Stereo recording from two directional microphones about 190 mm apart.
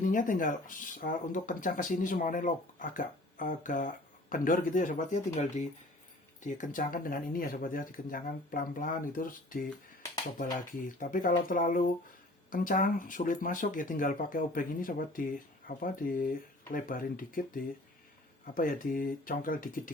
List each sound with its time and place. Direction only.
0.0 s speech: 45° left (ahead or behind)
10.8 s speech: 45° left (ahead or behind)